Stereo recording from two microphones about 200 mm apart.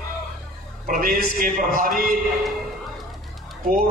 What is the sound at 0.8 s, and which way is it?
A man's voice, 45° right (ahead or behind).